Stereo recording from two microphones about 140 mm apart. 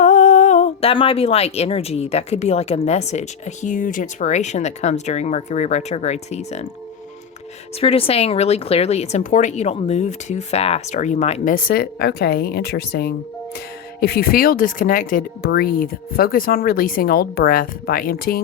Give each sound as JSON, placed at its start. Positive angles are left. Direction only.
{"t": 0.0, "sound": "speech", "side_deg": 60}
{"t": 7.8, "sound": "speech", "side_deg": 45}
{"t": 11.5, "sound": "speech", "side_deg": 90}
{"t": 14.2, "sound": "speech", "side_deg": 90}